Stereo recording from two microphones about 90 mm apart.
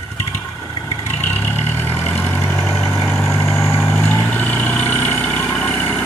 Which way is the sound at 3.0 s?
30° left (ahead or behind).